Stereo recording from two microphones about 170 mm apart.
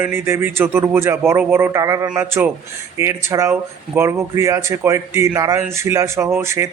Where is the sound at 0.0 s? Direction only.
15° right (ahead or behind).